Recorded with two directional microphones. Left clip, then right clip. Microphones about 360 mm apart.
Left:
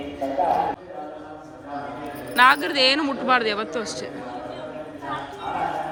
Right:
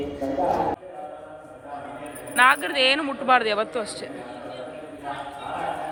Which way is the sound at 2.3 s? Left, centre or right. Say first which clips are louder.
Left 2 dB; centre.